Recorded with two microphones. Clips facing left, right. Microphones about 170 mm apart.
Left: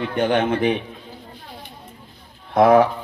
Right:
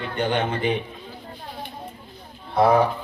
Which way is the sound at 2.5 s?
90° left.